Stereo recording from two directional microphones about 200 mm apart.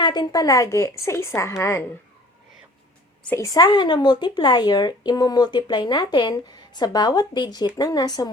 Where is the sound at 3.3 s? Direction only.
15° left (ahead or behind).